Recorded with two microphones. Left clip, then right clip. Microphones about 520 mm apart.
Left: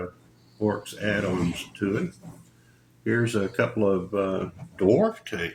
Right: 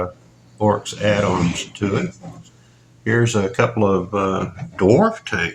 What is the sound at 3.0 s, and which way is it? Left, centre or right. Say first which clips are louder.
Speech: right 7 dB; centre.